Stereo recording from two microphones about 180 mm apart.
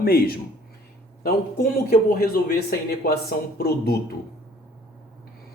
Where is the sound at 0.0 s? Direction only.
55° left (ahead or behind).